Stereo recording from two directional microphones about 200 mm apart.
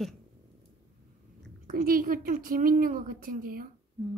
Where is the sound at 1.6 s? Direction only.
45° right (ahead or behind).